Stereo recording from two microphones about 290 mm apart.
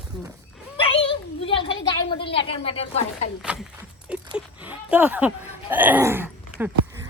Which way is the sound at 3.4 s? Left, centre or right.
Centre.